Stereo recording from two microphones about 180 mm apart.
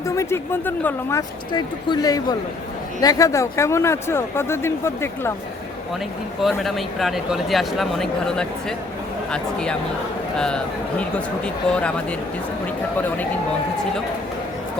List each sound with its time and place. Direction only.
0.0 s speech: 15° left (ahead or behind)
1.5 s speech: 20° left (ahead or behind)
6.4 s speech: centre (ahead or behind)